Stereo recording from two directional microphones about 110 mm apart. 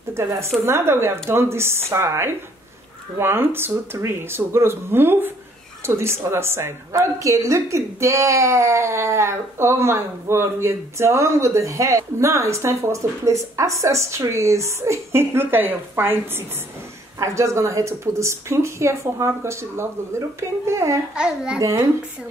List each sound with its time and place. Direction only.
0.1 s a woman's voice: 25° right (ahead or behind)
21.1 s a child's voice: 10° right (ahead or behind)